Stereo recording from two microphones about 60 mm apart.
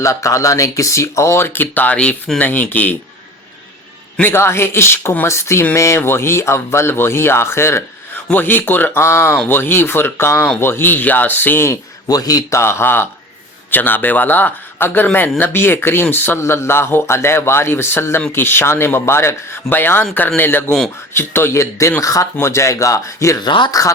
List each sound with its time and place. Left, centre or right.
0.0 s speech: left; by 2.3 s centre
2.4 s speech: left
4.2 s speech: left
8.3 s speech: left
9.0 s speech: left
10.3 s speech: left
10.6 s speech: left
12.0 s speech: left
12.5 s speech: left
16.4 s speech: left